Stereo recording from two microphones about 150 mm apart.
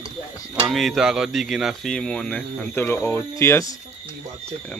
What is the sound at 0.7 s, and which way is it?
Speech, centre (ahead or behind).